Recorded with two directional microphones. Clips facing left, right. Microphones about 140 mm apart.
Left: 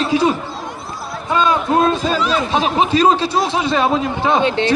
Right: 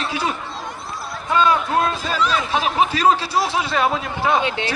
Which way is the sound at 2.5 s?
25° left (ahead or behind).